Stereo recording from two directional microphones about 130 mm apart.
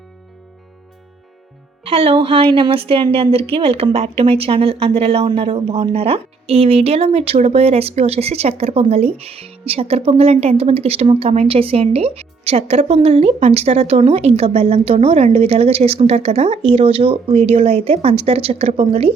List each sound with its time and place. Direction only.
1.8 s speech: 50° right (ahead or behind)